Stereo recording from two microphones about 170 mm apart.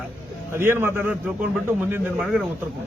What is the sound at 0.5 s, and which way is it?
A man's voice, 15° right (ahead or behind).